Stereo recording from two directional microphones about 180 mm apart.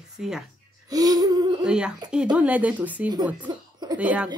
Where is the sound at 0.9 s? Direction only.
20° right (ahead or behind).